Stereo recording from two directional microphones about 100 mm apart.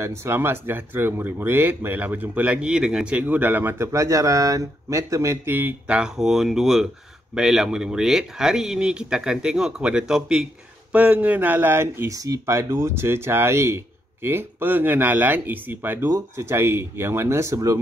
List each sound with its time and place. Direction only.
0.0 s speech: 25° right (ahead or behind)
16.1 s speech: 30° right (ahead or behind)